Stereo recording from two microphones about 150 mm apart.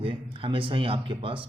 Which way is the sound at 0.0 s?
35° right (ahead or behind).